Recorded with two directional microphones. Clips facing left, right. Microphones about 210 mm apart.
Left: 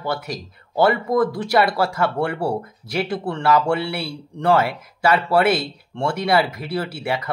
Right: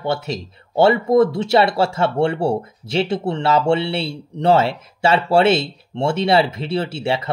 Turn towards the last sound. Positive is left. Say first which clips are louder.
# right 3 dB
turn(degrees=-25)  # may be behind; listen again after turning